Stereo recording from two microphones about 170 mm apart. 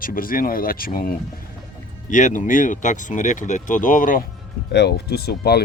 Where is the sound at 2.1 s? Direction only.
45° left (ahead or behind).